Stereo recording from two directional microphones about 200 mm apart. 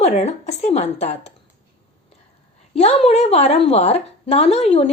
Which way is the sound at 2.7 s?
30° left (ahead or behind).